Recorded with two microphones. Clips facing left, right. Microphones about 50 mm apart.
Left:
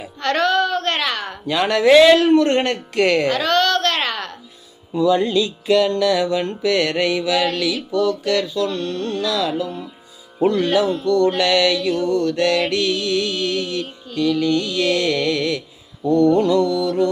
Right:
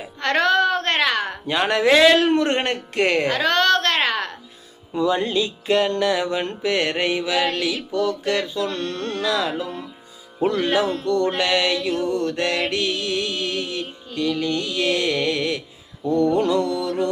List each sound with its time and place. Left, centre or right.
0.2 s a sound: right
2.1 s mantra: right
2.5 s music: right
8.7 s carnatic music: right
9.2 s mantra: right
11.0 s music: right
16.1 s mantra: right